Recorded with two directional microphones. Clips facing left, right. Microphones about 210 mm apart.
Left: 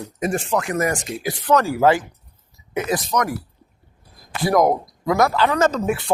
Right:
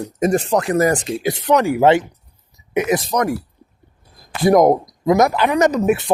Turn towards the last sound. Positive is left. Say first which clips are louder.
# right 4 dB
turn(degrees=-20)  # may be behind; listen again after turning